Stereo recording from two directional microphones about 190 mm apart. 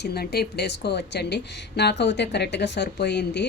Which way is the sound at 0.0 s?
55° left (ahead or behind).